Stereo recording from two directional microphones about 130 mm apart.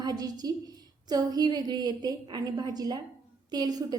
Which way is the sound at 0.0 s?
30° right (ahead or behind).